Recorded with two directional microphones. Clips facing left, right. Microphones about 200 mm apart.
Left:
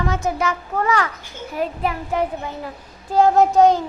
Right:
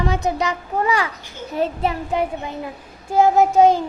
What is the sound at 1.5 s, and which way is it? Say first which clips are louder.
Speech: right 2 dB; 25° right (ahead or behind).